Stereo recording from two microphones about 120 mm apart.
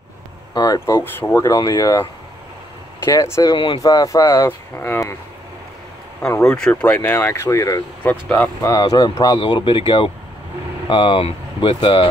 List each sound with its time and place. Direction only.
0.7 s speech: 20° left (ahead or behind)
1.5 s speech: 30° left (ahead or behind)
3.1 s speech: 25° left (ahead or behind)
3.5 s speech: 45° left (ahead or behind)
3.8 s speech: 30° left (ahead or behind)
6.4 s speech: 5° left (ahead or behind); by 7.8 s 25° left (ahead or behind)
8.0 s speech: 15° left (ahead or behind)
8.6 s speech: 35° left (ahead or behind)